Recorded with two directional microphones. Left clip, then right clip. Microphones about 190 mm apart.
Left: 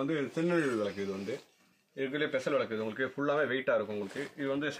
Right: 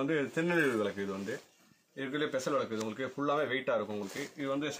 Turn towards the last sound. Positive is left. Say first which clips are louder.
# left 1 dB
turn(degrees=0)  # may be behind; listen again after turning